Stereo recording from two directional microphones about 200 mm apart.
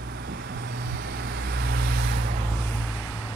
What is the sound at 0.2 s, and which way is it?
Vehicle, 50° right (ahead or behind).